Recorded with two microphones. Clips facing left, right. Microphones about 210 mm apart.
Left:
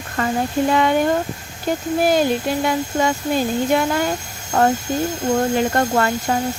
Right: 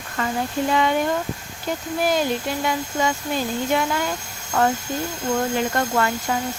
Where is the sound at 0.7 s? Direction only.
50° left (ahead or behind).